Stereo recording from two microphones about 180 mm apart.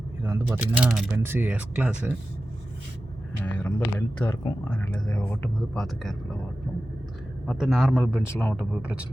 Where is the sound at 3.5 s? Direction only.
15° left (ahead or behind).